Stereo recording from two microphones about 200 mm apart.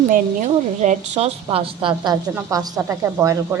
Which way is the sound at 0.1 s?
35° right (ahead or behind).